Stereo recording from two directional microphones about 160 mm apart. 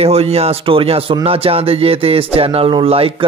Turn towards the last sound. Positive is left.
turn(degrees=-35)  # may be behind; listen again after turning